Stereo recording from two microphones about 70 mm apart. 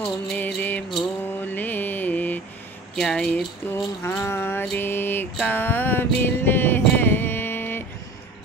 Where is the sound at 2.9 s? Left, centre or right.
Centre.